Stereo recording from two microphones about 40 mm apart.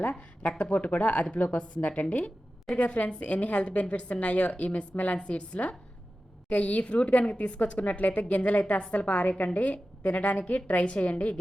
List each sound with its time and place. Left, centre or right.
0.6 s a woman's voice: left